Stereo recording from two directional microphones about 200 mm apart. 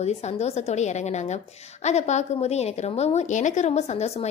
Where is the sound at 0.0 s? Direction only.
35° left (ahead or behind).